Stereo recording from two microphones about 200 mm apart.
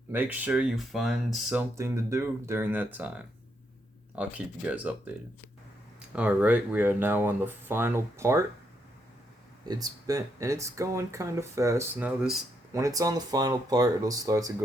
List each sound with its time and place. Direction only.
0.1 s speech: 10° right (ahead or behind)
1.7 s speech: 15° right (ahead or behind)
6.1 s speech: 5° right (ahead or behind)
9.6 s speech: 20° right (ahead or behind)
12.7 s speech: 15° right (ahead or behind)